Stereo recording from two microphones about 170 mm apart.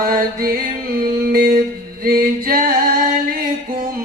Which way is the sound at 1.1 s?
60° right (ahead or behind).